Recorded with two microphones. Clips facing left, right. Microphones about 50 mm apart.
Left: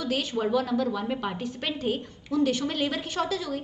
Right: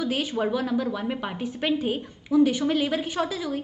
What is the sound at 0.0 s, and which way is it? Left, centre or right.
A woman's voice, centre.